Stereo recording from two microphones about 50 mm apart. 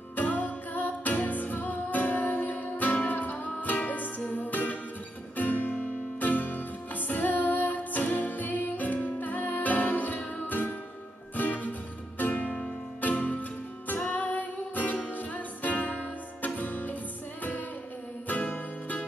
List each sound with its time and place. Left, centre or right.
0.1 s music: left